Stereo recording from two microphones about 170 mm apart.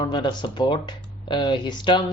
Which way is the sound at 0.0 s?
25° left (ahead or behind).